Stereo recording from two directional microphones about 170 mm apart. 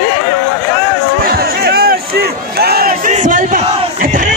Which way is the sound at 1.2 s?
60° right (ahead or behind).